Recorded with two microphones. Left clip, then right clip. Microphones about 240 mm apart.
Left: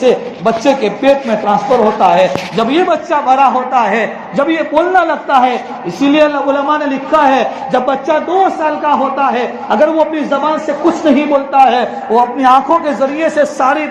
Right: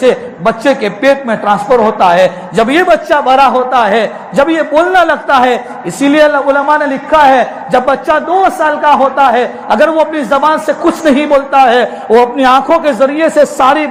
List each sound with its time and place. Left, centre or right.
0.0 s a man's voice: right